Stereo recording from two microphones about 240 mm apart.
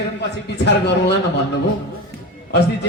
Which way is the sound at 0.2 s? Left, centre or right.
Left.